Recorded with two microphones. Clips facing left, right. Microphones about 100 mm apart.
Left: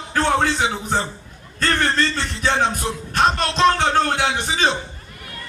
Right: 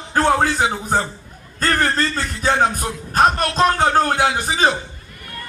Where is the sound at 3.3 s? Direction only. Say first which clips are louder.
Right 1 dB; 25° left (ahead or behind).